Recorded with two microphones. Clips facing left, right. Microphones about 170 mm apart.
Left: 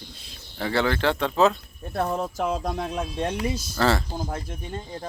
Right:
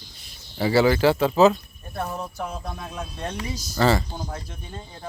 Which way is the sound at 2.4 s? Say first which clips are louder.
Left 6 dB; 90° left.